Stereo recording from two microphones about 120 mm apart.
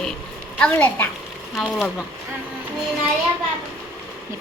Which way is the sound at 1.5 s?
Centre (ahead or behind).